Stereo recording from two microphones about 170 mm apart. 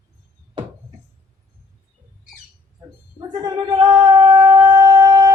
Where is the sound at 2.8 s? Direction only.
15° right (ahead or behind).